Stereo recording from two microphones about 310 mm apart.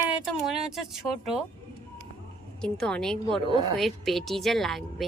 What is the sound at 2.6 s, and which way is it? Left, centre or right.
Speech, centre.